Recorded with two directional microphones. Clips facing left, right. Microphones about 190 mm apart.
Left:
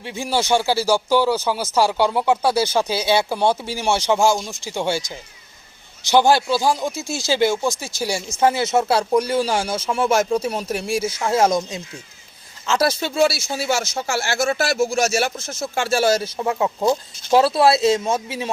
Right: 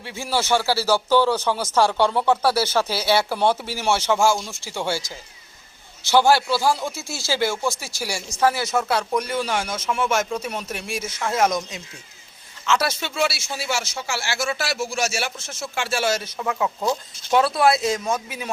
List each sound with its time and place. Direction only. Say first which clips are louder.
0.0 s speech: left 3 dB; 15° left (ahead or behind)